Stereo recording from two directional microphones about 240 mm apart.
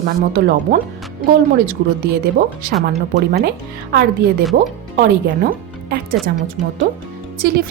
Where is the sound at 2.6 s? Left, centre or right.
Right.